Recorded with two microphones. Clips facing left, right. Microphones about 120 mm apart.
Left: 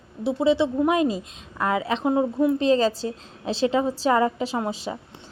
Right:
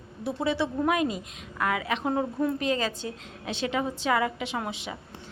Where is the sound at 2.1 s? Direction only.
15° left (ahead or behind).